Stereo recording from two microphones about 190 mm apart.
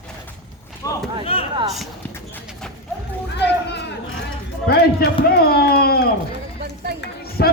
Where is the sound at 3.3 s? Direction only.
60° left (ahead or behind).